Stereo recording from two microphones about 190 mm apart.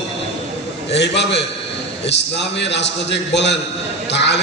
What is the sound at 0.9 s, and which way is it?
Speech, 65° left (ahead or behind).